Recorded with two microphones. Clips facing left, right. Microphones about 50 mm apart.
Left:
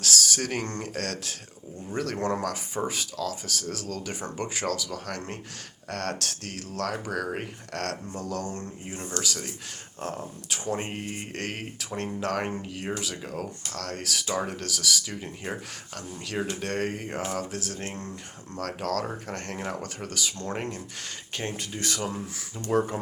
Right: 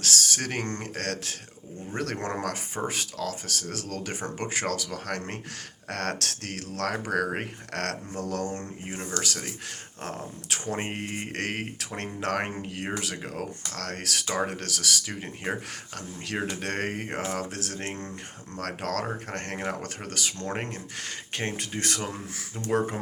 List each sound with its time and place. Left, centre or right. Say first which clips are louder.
0.0 s speech: left 1 dB; right
10.5 s speech: even; right
14.3 s speech: right 1 dB; right
16.0 s speech: even; right
16.6 s speech: left 1 dB; right
22.5 s speech: left 1 dB; right